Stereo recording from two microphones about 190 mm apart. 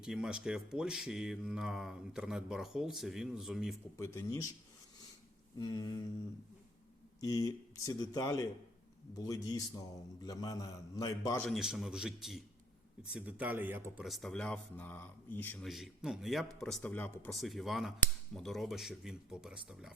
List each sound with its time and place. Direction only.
0.0 s a man's voice: 5° right (ahead or behind)
3.9 s speech: 15° left (ahead or behind)
5.5 s a man's voice: 20° left (ahead or behind)
7.2 s a man's voice: 20° left (ahead or behind)
11.4 s a man's voice: centre (ahead or behind)